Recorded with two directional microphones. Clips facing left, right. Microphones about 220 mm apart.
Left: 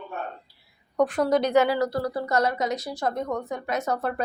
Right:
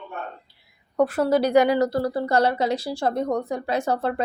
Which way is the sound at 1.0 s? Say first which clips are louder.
Right 2 dB; 5° right (ahead or behind).